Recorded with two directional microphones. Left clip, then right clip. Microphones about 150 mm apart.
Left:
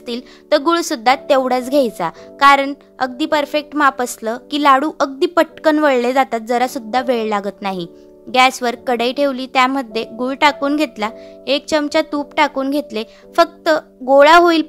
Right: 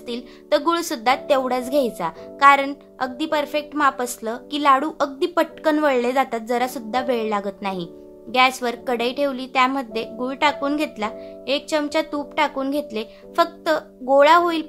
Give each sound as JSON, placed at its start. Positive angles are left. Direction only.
{"t": 0.0, "sound": "a woman's voice", "side_deg": 45}